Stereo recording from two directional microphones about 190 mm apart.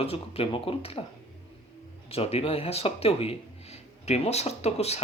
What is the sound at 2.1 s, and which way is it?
Speech, 30° left (ahead or behind).